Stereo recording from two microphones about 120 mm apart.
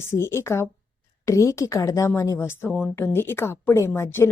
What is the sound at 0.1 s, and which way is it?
A woman's voice, 20° left (ahead or behind).